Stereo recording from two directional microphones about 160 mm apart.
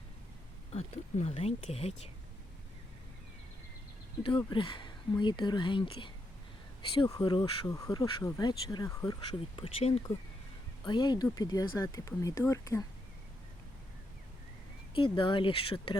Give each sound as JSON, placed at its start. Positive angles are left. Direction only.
{"t": 0.7, "sound": "speech", "side_deg": 40}
{"t": 4.2, "sound": "speech", "side_deg": 30}
{"t": 7.7, "sound": "speech", "side_deg": 20}
{"t": 10.8, "sound": "speech", "side_deg": 30}
{"t": 14.9, "sound": "speech", "side_deg": 30}